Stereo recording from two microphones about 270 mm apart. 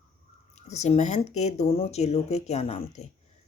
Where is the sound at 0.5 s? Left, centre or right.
Left.